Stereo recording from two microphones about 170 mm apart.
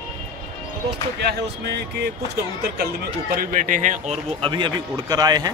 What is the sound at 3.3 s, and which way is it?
Speech, 50° right (ahead or behind).